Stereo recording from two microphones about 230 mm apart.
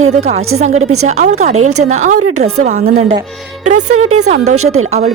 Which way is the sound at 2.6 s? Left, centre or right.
Right.